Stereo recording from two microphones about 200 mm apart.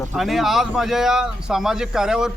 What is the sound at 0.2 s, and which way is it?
Speech, centre (ahead or behind).